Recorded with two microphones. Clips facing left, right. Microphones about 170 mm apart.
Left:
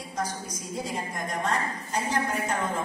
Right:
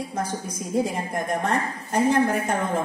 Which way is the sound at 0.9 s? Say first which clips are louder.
Right 6 dB; 55° right (ahead or behind).